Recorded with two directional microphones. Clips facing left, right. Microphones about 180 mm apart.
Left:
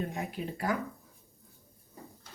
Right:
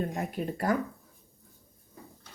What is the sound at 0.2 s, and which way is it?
Speech, 50° right (ahead or behind).